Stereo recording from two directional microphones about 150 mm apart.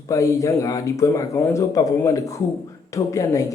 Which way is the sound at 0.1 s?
20° left (ahead or behind).